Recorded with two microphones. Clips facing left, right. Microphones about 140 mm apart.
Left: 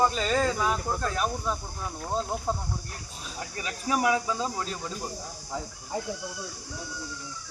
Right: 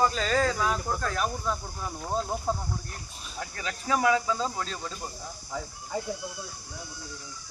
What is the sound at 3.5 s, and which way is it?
Speech, 15° left (ahead or behind).